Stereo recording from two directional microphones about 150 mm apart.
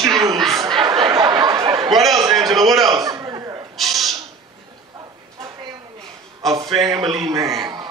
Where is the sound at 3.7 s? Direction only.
Centre (ahead or behind).